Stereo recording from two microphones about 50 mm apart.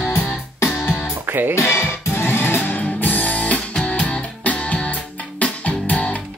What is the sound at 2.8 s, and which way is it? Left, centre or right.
Music, left.